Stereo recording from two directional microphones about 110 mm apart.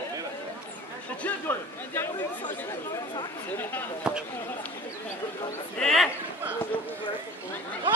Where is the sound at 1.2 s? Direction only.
20° left (ahead or behind).